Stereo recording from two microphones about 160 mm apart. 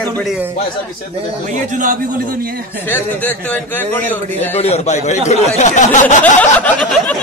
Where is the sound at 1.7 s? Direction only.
55° right (ahead or behind).